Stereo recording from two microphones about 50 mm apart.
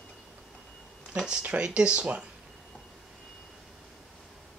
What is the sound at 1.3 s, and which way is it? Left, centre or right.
Speech, right.